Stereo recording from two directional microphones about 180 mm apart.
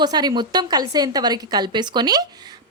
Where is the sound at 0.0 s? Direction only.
20° right (ahead or behind).